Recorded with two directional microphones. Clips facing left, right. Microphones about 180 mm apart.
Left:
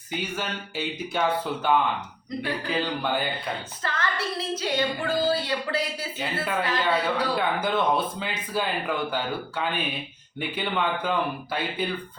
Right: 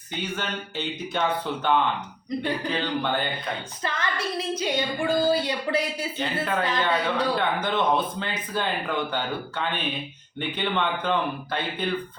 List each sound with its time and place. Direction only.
0.1 s speech: 5° left (ahead or behind)
3.8 s a woman's voice: 15° right (ahead or behind)
6.4 s speech: 5° left (ahead or behind)